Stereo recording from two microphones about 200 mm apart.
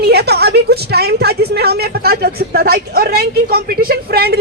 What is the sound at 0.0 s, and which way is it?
A woman's voice, 55° right (ahead or behind).